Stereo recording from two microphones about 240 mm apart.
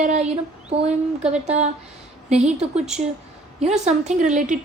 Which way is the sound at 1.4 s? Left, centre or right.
Right.